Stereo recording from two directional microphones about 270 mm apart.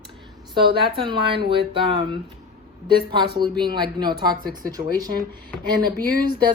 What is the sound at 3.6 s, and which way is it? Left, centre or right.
Speech, centre.